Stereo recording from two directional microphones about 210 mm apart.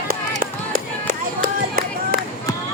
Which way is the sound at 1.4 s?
45° right (ahead or behind).